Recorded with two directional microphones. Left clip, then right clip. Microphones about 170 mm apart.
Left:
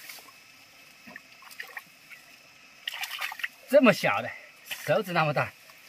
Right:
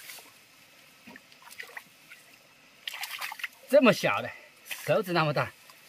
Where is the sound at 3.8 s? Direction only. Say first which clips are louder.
Left 1 dB; 30° right (ahead or behind).